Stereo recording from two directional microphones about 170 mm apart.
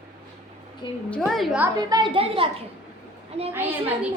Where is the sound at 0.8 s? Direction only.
25° left (ahead or behind).